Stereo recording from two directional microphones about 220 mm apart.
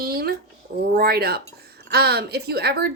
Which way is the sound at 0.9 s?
45° right (ahead or behind).